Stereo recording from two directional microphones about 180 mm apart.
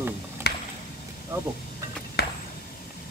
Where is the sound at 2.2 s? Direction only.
65° left (ahead or behind).